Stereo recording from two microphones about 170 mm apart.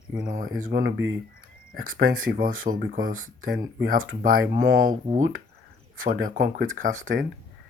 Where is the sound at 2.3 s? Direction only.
55° right (ahead or behind).